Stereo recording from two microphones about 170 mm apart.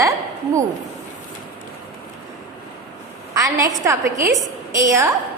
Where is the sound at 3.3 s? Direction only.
20° right (ahead or behind).